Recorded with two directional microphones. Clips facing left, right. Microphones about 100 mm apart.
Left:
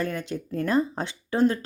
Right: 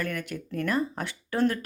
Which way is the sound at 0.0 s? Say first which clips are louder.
Left 3 dB; 25° left (ahead or behind).